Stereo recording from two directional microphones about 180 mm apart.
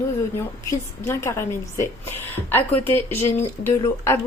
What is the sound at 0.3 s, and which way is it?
Speech, 15° left (ahead or behind).